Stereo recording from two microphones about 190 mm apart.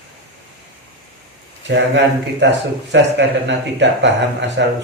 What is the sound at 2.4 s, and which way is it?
Speech, 65° right (ahead or behind).